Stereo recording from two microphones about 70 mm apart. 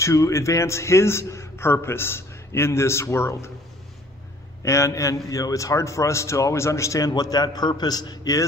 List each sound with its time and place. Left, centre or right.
0.0 s a man's voice: left
4.6 s a man's voice: left